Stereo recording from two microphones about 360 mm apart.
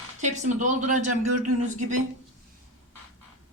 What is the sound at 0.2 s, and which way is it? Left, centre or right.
Speech, centre.